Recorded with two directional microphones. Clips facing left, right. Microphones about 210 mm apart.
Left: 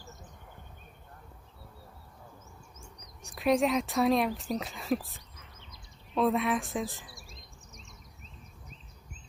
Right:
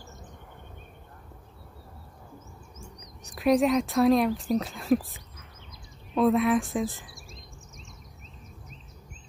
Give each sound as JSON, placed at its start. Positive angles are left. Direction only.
{"t": 3.3, "sound": "speech", "side_deg": 0}